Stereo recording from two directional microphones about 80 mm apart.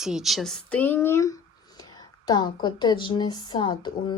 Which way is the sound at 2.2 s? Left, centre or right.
Left.